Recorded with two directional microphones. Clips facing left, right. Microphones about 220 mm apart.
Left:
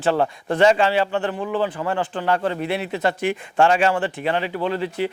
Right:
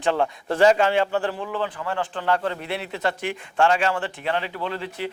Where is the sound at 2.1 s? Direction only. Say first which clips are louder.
Even; 10° left (ahead or behind).